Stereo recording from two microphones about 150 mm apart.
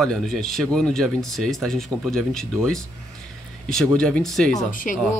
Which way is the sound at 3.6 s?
5° left (ahead or behind).